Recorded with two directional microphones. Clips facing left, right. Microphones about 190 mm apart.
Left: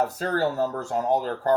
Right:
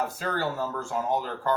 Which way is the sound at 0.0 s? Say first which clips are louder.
Left 5 dB; 40° left (ahead or behind).